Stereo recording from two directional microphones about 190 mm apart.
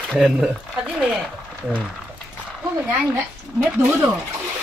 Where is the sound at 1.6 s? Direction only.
5° right (ahead or behind).